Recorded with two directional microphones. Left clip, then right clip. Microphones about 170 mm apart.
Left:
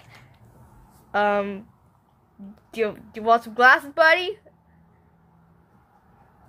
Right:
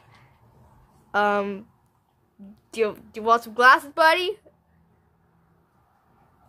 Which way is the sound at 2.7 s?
15° right (ahead or behind).